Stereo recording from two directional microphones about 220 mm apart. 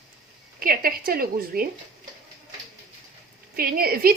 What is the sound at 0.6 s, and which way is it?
Speech, 40° right (ahead or behind).